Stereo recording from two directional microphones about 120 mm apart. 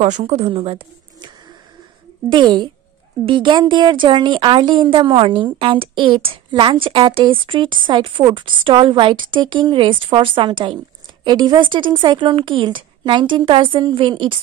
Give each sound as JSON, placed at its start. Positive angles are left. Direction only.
{"t": 0.2, "sound": "speech", "side_deg": -60}
{"t": 0.5, "sound": "speech", "side_deg": -50}
{"t": 2.3, "sound": "a woman's voice", "side_deg": -40}